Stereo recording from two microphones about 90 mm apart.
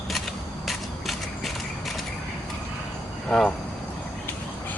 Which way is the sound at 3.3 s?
10° left (ahead or behind).